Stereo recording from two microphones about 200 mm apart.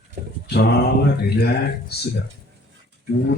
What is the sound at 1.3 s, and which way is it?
Speech, 55° left (ahead or behind).